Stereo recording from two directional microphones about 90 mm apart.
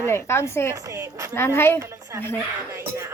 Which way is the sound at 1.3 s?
30° left (ahead or behind).